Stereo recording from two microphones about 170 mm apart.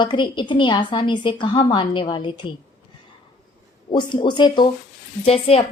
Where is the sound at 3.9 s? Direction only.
30° left (ahead or behind).